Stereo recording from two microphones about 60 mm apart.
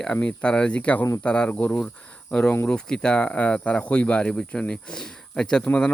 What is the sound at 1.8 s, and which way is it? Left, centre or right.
Speech, centre.